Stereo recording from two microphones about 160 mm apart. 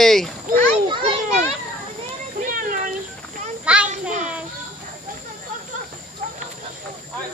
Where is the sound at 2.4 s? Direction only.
60° right (ahead or behind).